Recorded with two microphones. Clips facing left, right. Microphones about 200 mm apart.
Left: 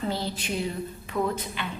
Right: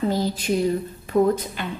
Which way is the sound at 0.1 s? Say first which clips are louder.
Right 8 dB; 40° right (ahead or behind).